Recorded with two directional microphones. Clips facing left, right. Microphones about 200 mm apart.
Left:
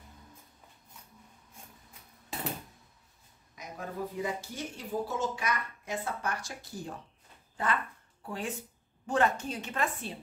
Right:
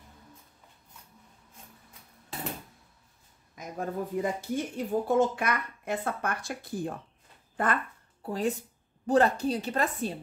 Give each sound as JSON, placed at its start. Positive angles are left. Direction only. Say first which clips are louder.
{"t": 3.5, "sound": "speech", "louder": "right 5 dB", "side_deg": -50}
{"t": 8.3, "sound": "a woman's voice", "louder": "right 7 dB", "side_deg": -40}